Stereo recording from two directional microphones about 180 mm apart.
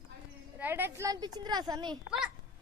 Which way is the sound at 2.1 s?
5° right (ahead or behind).